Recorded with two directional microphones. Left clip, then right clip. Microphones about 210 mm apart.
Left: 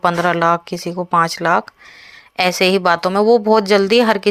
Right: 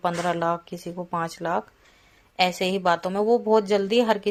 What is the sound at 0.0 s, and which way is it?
A woman's voice, 20° left (ahead or behind).